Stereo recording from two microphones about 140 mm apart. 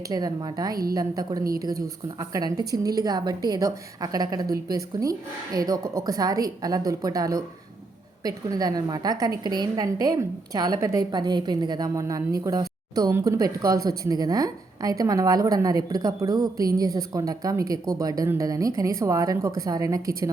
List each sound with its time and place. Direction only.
0.1 s a woman's voice: 25° right (ahead or behind)
0.7 s a woman's voice: 90° right
0.9 s a woman's voice: 25° right (ahead or behind)